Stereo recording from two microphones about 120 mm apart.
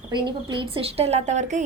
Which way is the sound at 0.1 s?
40° right (ahead or behind).